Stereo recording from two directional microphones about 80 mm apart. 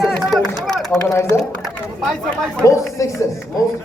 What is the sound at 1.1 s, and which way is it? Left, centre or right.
Speech, left.